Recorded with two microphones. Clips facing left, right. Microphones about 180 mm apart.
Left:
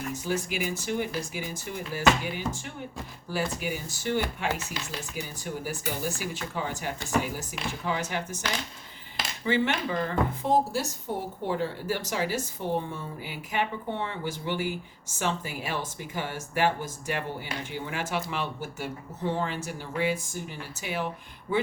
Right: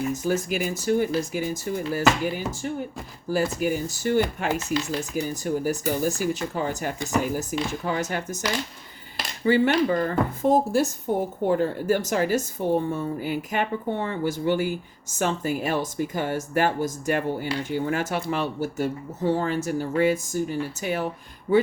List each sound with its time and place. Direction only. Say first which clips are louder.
0.1 s speech: right 6 dB; 40° right (ahead or behind)